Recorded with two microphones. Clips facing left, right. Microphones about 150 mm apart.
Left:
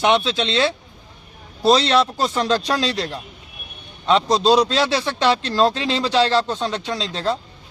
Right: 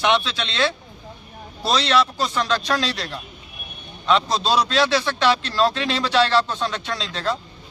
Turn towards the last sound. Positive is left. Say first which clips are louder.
# left 3 dB
turn(degrees=30)  # may be behind; listen again after turning